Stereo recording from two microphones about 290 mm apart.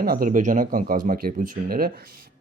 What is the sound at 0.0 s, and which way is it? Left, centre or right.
Speech, right.